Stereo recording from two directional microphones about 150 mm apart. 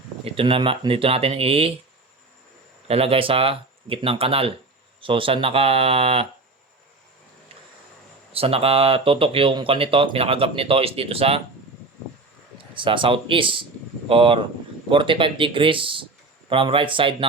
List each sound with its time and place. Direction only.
0.3 s speech: 35° right (ahead or behind)
2.8 s speech: 40° right (ahead or behind)
8.3 s speech: 40° right (ahead or behind)
12.5 s speech: 35° right (ahead or behind)